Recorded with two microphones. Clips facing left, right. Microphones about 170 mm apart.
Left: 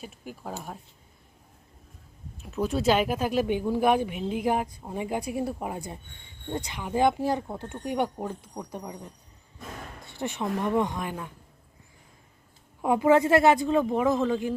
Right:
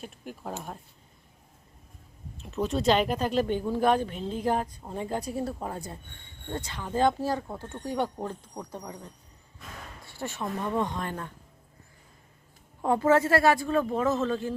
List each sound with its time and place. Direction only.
0.0 s speech: 5° left (ahead or behind)
2.4 s speech: centre (ahead or behind)
10.1 s speech: 20° left (ahead or behind)
12.8 s speech: 15° left (ahead or behind)